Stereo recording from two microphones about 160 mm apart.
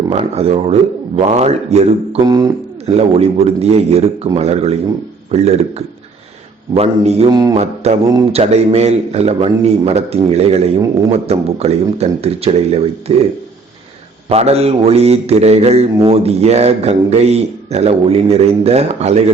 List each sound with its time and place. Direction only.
0.1 s a man's voice: 40° right (ahead or behind)
2.2 s speech: 25° right (ahead or behind)
2.8 s a man's voice: 40° right (ahead or behind)
7.3 s speech: 25° right (ahead or behind)
7.5 s a man's voice: 40° right (ahead or behind)
14.3 s a man's voice: 40° right (ahead or behind)